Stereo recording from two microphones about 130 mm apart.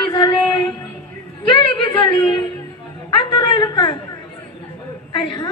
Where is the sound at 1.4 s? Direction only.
40° left (ahead or behind).